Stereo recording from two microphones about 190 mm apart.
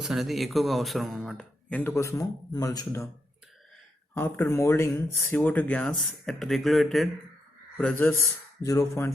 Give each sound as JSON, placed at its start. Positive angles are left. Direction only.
{"t": 0.0, "sound": "speech", "side_deg": 0}
{"t": 4.1, "sound": "speech", "side_deg": 10}